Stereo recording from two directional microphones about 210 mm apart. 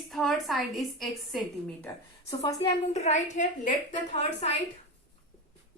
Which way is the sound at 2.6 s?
30° left (ahead or behind).